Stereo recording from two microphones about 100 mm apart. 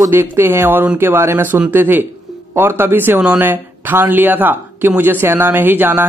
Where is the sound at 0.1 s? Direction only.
25° right (ahead or behind).